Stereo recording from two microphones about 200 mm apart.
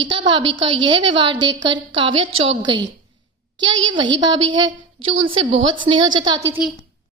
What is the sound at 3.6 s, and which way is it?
Speech, 70° right (ahead or behind).